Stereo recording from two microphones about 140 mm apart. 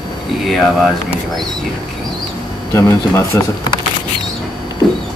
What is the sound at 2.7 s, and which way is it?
Speech, 20° left (ahead or behind).